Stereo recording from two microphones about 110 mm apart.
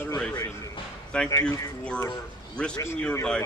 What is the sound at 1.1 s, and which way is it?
Speech, 10° left (ahead or behind).